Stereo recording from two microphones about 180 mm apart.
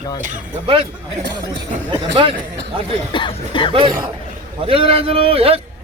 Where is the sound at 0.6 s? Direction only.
30° right (ahead or behind).